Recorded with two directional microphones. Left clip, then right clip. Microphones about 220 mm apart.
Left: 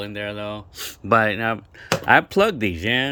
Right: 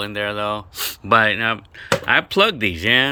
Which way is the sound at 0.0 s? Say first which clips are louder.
Right 6 dB; 10° left (ahead or behind).